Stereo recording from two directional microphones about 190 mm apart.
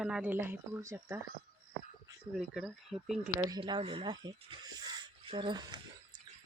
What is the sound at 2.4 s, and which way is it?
Speech, centre (ahead or behind).